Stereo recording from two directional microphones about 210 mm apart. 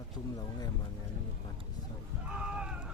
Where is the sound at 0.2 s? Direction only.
20° left (ahead or behind).